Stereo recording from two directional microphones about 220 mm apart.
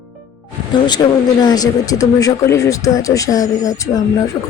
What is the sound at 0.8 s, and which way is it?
A woman's voice, 20° left (ahead or behind).